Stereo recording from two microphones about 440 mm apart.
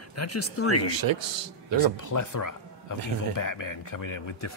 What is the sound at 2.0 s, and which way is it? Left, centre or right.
Speech, left.